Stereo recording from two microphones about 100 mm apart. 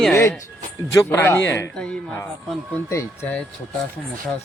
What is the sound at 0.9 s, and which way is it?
Speech, 25° left (ahead or behind).